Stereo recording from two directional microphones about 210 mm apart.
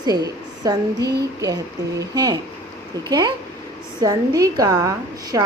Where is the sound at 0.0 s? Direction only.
20° right (ahead or behind).